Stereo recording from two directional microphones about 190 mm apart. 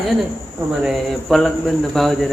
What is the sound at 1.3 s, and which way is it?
Speech, 5° left (ahead or behind).